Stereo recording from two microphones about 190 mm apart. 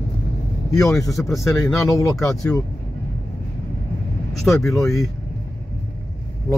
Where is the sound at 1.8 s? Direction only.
15° left (ahead or behind).